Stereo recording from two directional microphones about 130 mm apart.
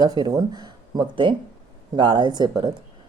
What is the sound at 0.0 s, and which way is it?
Speech, 30° right (ahead or behind).